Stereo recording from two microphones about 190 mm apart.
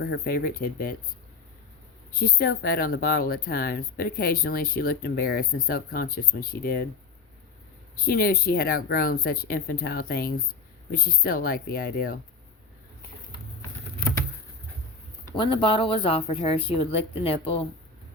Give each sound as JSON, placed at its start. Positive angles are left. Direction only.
{"t": 0.0, "sound": "speech", "side_deg": 55}
{"t": 2.1, "sound": "speech", "side_deg": 50}
{"t": 8.0, "sound": "speech", "side_deg": 50}
{"t": 15.4, "sound": "speech", "side_deg": 25}